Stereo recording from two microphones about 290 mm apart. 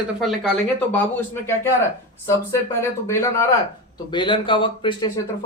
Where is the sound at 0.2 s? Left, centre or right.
Centre.